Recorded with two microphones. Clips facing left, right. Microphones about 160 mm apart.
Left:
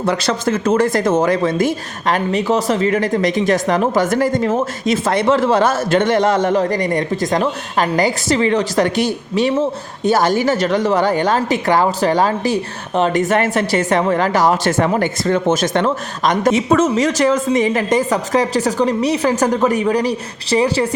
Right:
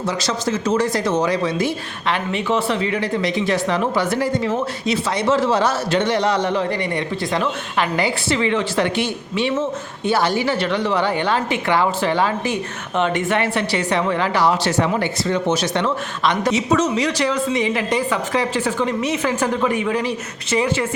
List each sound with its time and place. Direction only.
0.0 s speech: 60° left (ahead or behind); by 20.8 s 35° left (ahead or behind)